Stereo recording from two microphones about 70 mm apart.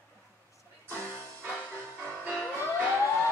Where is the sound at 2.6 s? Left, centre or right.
Left.